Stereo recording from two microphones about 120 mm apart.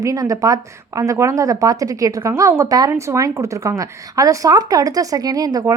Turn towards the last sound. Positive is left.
turn(degrees=-30)  # may be behind; listen again after turning